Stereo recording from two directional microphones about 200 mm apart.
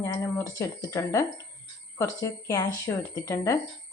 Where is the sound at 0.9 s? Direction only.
15° left (ahead or behind).